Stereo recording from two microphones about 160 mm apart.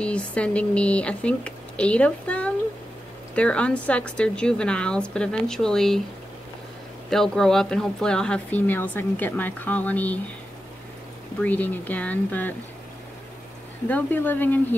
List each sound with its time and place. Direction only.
0.0 s speech: 10° left (ahead or behind)
7.1 s speech: 5° left (ahead or behind)
11.3 s speech: 10° left (ahead or behind)
13.8 s speech: 10° left (ahead or behind)